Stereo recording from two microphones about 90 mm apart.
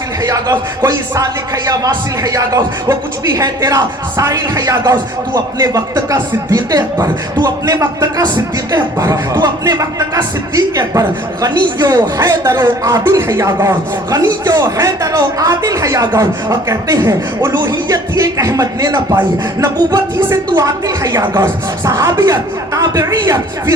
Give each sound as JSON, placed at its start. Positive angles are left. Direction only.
{"t": 0.2, "sound": "speech", "side_deg": -45}
{"t": 12.9, "sound": "speech", "side_deg": -30}
{"t": 21.4, "sound": "speech", "side_deg": -30}